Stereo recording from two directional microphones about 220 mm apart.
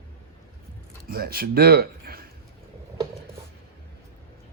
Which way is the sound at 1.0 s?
45° right (ahead or behind).